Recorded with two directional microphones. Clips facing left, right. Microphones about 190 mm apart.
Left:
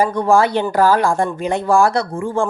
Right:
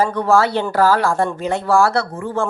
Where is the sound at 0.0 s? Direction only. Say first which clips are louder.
Left 1 dB; 15° left (ahead or behind).